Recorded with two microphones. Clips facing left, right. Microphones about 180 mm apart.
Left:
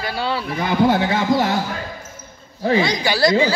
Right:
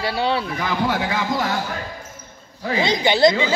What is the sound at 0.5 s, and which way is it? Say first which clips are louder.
A man's voice: left 5 dB; 30° left (ahead or behind).